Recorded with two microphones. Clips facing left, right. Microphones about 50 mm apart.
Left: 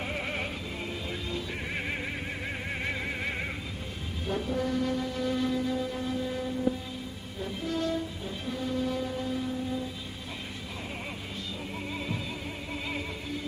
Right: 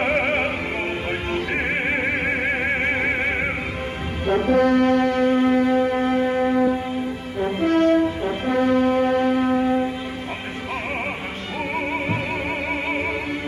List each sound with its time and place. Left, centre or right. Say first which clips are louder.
0.0 s music: right 13 dB; right
4.3 s music: right 13 dB; right
7.3 s brass instrument: right 14 dB; right